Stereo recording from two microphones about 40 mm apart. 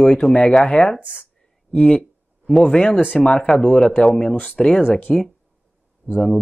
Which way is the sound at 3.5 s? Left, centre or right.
Left.